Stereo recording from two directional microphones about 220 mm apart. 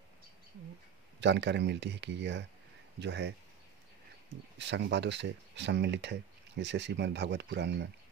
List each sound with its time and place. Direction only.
1.2 s speech: 55° right (ahead or behind)
4.6 s speech: 55° right (ahead or behind)